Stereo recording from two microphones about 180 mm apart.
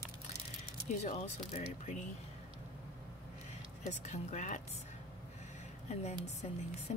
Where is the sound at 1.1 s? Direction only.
35° left (ahead or behind).